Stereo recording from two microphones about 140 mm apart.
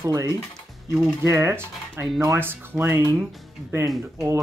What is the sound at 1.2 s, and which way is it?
Speech, 20° right (ahead or behind).